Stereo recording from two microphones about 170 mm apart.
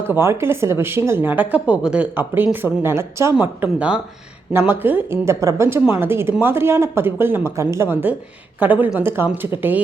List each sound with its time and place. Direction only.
0.1 s speech: 15° right (ahead or behind)